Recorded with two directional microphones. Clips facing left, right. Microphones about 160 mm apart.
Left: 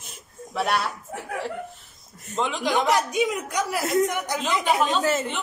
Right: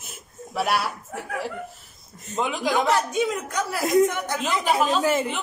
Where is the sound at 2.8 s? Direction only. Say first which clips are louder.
Left 1 dB; 15° left (ahead or behind).